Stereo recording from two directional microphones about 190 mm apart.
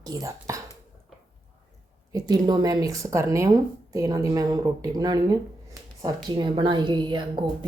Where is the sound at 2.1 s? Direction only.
20° right (ahead or behind).